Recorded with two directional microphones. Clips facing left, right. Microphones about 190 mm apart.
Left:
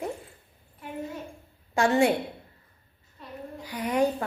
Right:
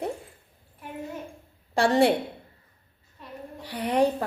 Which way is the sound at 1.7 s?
35° right (ahead or behind).